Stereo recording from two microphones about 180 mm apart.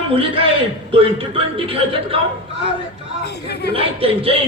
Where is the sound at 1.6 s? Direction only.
30° right (ahead or behind).